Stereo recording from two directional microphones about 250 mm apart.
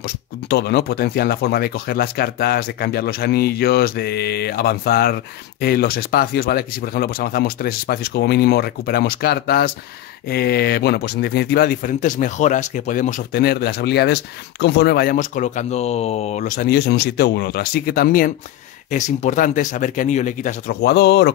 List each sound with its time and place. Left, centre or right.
0.5 s speech: left